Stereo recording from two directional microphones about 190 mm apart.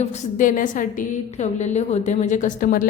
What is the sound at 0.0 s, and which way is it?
A woman's voice, 45° left (ahead or behind).